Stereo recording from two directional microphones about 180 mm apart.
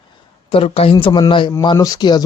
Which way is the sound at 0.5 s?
30° left (ahead or behind).